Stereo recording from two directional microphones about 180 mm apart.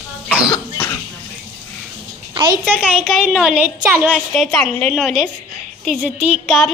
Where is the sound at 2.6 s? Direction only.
10° right (ahead or behind).